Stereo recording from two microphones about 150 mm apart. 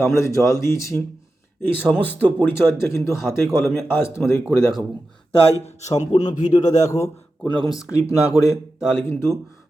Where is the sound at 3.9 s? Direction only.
15° left (ahead or behind).